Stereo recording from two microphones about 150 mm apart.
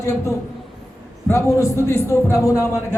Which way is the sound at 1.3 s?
20° left (ahead or behind).